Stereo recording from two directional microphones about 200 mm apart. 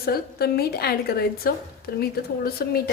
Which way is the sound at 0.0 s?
50° left (ahead or behind).